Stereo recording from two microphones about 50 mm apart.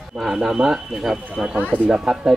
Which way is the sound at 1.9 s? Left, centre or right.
Centre.